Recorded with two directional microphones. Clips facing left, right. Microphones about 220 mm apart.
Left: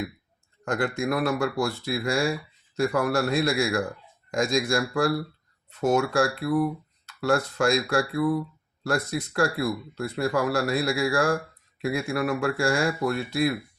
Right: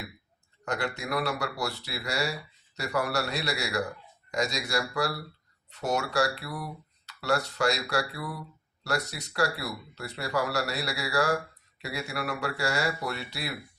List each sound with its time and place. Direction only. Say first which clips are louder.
0.6 s speech: left 6 dB; 50° left (ahead or behind)